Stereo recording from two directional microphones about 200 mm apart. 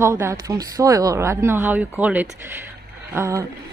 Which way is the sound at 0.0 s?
15° right (ahead or behind).